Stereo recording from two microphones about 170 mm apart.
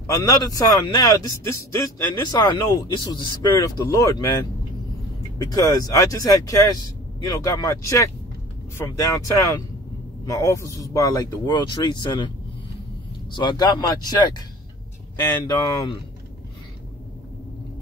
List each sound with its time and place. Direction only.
0.0 s speech: 20° left (ahead or behind)
13.3 s speech: 25° left (ahead or behind)
15.4 s speech: 20° left (ahead or behind)